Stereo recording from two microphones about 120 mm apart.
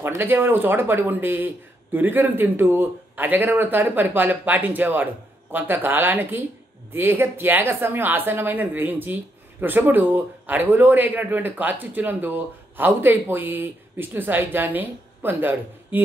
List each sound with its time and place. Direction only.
0.0 s speech: 20° right (ahead or behind)